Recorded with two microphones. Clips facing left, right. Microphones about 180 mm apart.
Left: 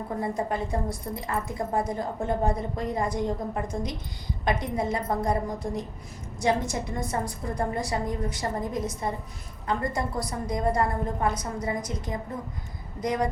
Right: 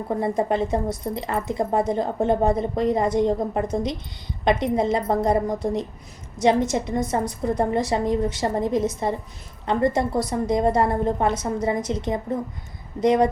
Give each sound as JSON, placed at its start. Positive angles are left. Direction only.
{"t": 0.2, "sound": "a woman's voice", "side_deg": -20}